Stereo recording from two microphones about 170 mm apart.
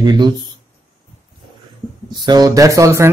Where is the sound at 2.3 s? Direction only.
20° right (ahead or behind).